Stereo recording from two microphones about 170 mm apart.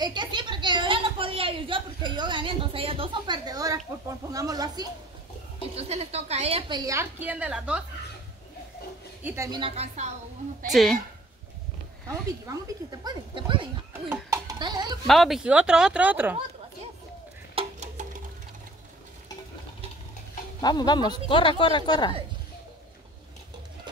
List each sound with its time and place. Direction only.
0.0 s a woman's voice: 25° right (ahead or behind)
5.8 s a woman's voice: 40° right (ahead or behind)
6.8 s a woman's voice: 15° right (ahead or behind)
9.2 s a woman's voice: 15° right (ahead or behind)
9.6 s a woman's voice: 35° right (ahead or behind)
10.7 s speech: centre (ahead or behind)
12.4 s speech: 25° right (ahead or behind)
13.9 s a child's voice: 10° right (ahead or behind)
15.0 s speech: centre (ahead or behind)
17.6 s a sound: 40° right (ahead or behind)
20.6 s speech: 25° left (ahead or behind)